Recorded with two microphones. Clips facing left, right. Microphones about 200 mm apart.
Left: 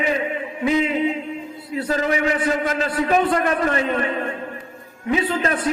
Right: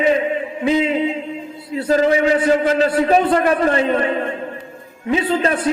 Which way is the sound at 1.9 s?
30° right (ahead or behind).